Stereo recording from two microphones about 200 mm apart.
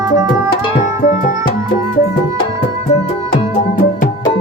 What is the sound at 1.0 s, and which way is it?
Music, 40° left (ahead or behind).